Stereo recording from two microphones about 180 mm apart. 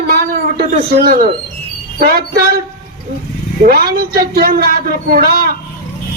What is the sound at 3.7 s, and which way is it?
A man's voice, 55° right (ahead or behind).